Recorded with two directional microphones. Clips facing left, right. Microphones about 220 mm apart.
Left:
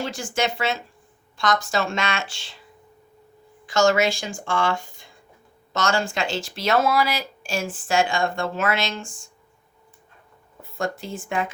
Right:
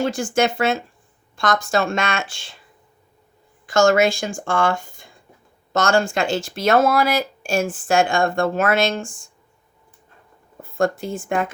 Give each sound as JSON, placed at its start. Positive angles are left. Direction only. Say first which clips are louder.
{"t": 0.0, "sound": "speech", "louder": "right 6 dB", "side_deg": -50}
{"t": 3.7, "sound": "speech", "louder": "right 4 dB", "side_deg": -50}
{"t": 10.6, "sound": "speech", "louder": "right 7 dB", "side_deg": -50}